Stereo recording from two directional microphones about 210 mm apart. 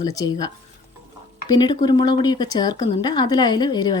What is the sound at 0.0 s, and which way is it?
Speech, 15° left (ahead or behind).